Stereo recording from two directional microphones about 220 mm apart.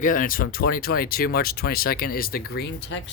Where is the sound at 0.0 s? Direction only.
35° left (ahead or behind).